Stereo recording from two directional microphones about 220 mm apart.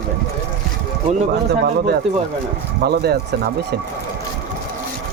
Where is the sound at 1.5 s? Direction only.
50° right (ahead or behind).